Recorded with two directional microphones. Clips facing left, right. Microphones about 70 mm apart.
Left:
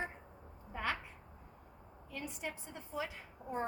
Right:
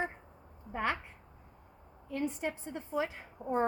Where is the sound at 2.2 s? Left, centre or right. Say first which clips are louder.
Right 5 dB; right.